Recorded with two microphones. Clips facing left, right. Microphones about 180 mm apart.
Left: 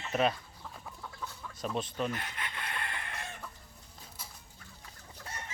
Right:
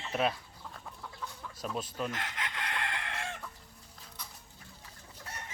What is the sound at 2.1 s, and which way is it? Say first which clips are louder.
Chicken: even; 90° right.